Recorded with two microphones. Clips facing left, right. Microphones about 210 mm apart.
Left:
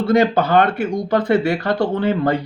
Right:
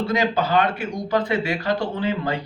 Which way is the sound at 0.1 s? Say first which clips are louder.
Left 8 dB; 55° left (ahead or behind).